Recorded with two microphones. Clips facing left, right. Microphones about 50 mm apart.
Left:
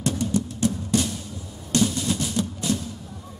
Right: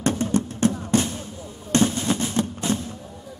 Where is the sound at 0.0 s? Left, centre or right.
Right.